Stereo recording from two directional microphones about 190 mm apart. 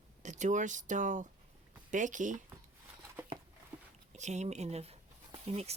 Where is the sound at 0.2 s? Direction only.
40° right (ahead or behind).